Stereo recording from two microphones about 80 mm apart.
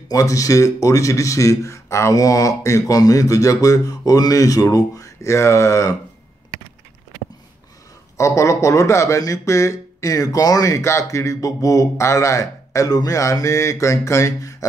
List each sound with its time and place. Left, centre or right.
0.1 s speech: left
8.2 s speech: left